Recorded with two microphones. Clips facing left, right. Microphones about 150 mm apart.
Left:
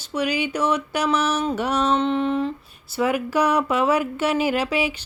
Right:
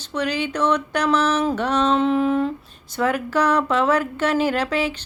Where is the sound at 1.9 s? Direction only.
Centre (ahead or behind).